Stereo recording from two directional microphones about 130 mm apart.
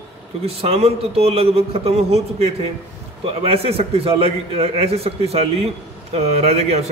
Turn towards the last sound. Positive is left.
turn(degrees=-55)  # may be behind; listen again after turning